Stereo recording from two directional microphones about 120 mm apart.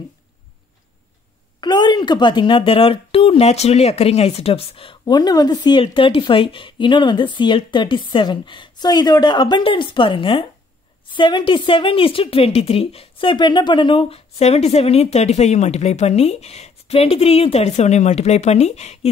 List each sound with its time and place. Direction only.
1.6 s speech: 40° left (ahead or behind)
5.0 s speech: 35° left (ahead or behind)
5.8 s a woman's voice: 45° left (ahead or behind); by 18.9 s 65° left (ahead or behind)